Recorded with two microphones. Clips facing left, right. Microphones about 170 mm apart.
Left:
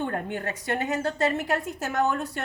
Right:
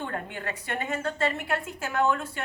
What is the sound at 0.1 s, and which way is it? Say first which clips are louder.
A woman's voice: left 4 dB; 45° left (ahead or behind).